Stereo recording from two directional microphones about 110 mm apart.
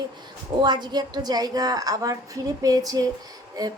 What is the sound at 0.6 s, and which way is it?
Speech, 40° right (ahead or behind).